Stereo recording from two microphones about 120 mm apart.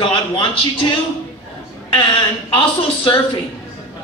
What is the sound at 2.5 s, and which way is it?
Speech, 45° left (ahead or behind).